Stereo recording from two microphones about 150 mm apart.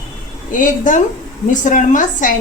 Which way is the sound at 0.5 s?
60° left (ahead or behind).